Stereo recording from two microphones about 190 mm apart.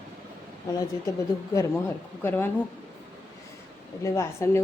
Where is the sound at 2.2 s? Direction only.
10° left (ahead or behind).